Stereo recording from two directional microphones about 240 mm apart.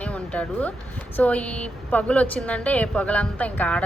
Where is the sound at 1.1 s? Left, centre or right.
Centre.